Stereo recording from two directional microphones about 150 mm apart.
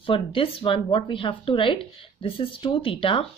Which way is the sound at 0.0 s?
35° left (ahead or behind).